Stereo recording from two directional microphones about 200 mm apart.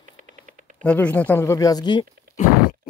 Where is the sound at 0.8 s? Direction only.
10° left (ahead or behind).